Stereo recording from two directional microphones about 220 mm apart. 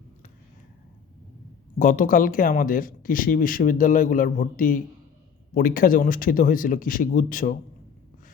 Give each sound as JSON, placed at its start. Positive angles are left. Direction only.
{"t": 1.8, "sound": "speech", "side_deg": 40}